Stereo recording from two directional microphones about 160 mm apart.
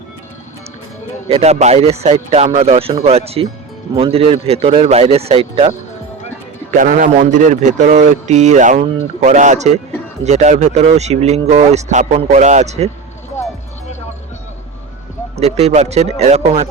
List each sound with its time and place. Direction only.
1.3 s a man's voice: 45° right (ahead or behind)
6.7 s a man's voice: 50° right (ahead or behind)
15.4 s a man's voice: 45° right (ahead or behind)